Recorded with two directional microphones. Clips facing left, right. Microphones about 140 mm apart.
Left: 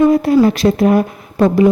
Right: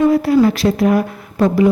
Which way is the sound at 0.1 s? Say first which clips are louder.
Left 1 dB; 20° left (ahead or behind).